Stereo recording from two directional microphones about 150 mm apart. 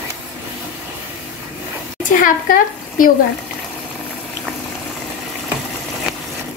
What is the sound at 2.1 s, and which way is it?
Speech, 65° left (ahead or behind).